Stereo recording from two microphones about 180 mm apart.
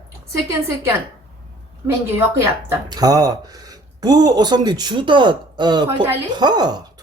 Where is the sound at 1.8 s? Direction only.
15° right (ahead or behind).